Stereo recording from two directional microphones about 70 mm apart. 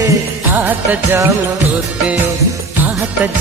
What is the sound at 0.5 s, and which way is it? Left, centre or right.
Music, right.